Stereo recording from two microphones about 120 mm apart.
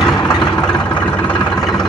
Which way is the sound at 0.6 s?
10° left (ahead or behind).